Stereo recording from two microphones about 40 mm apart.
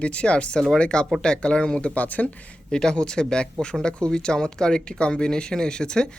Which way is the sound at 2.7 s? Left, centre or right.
Centre.